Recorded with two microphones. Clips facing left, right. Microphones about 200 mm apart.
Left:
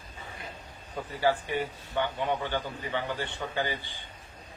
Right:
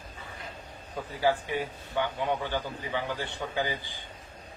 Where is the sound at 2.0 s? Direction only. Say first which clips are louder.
Even; 10° right (ahead or behind).